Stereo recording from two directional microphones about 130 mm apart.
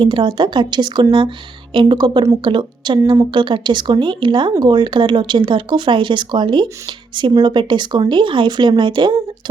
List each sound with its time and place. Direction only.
0.0 s speech: 35° right (ahead or behind)